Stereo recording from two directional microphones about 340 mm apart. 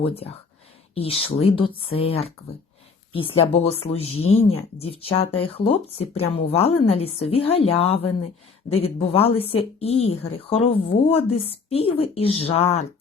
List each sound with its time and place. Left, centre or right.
0.0 s speech: centre